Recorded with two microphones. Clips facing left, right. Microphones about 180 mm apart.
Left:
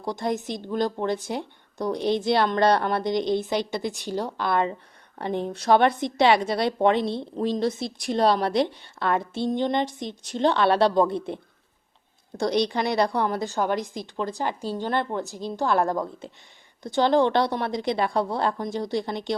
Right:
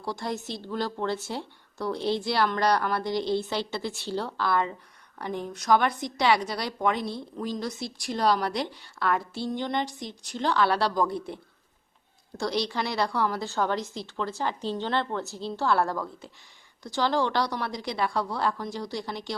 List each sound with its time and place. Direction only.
0.0 s a woman's voice: 20° left (ahead or behind)
12.4 s a woman's voice: 20° left (ahead or behind)